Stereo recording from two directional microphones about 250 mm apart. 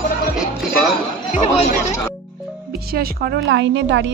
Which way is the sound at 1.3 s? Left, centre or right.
Left.